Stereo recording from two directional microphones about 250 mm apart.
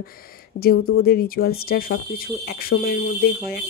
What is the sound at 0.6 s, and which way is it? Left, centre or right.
Speech, left.